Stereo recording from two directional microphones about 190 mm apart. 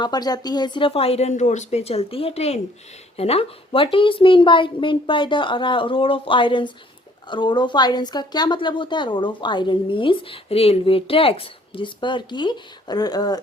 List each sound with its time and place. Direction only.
0.0 s a woman's voice: 20° left (ahead or behind)